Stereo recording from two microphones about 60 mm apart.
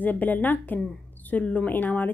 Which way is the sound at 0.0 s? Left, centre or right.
Left.